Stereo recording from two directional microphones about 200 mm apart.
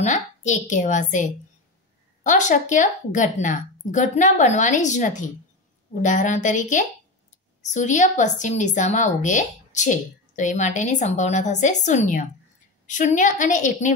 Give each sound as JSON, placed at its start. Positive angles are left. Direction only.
{"t": 0.0, "sound": "a woman's voice", "side_deg": 35}